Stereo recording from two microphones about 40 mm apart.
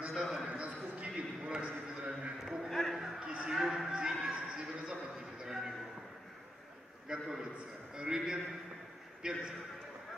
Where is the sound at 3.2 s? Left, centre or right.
Right.